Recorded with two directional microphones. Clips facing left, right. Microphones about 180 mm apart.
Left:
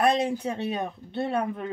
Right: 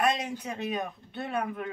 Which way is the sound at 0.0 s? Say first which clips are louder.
Left 5 dB; 35° left (ahead or behind).